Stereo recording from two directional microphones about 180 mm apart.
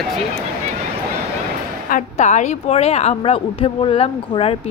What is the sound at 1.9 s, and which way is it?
A woman's voice, 45° left (ahead or behind).